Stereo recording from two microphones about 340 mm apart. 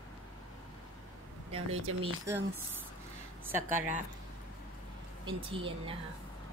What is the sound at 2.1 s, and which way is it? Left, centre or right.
Speech, centre.